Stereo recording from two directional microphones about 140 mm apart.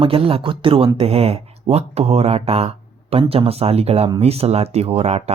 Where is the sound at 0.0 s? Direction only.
40° right (ahead or behind).